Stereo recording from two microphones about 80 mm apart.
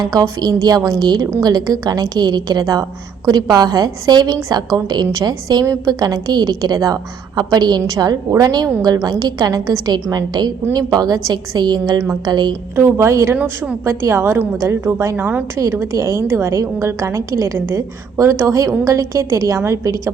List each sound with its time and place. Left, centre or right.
0.0 s a woman's voice: right
5.3 s a woman's voice: right
12.7 s a woman's voice: right
15.1 s a woman's voice: right
15.5 s a woman's voice: right